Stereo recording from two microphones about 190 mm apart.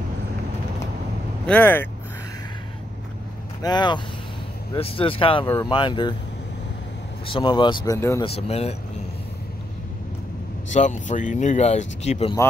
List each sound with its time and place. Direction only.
1.4 s speech: 10° left (ahead or behind)
3.6 s speech: 25° left (ahead or behind)
7.2 s speech: 25° left (ahead or behind)
8.2 s speech: 30° left (ahead or behind)
10.7 s speech: 40° left (ahead or behind)